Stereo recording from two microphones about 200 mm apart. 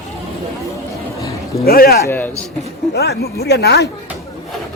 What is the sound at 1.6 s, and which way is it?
Speech, 50° left (ahead or behind).